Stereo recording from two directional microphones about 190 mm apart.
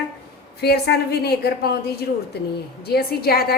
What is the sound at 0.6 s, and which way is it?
A woman's voice, 60° left (ahead or behind).